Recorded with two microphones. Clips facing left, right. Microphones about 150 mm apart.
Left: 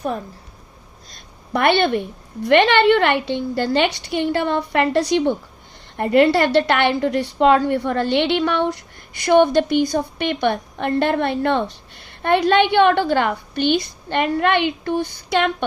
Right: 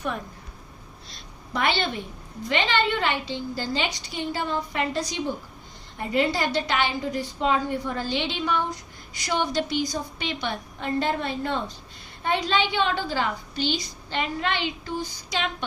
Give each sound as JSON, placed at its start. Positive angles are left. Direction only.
{"t": 1.1, "sound": "a woman's voice", "side_deg": 60}